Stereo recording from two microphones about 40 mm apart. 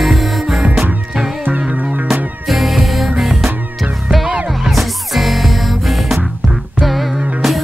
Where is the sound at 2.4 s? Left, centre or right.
Centre.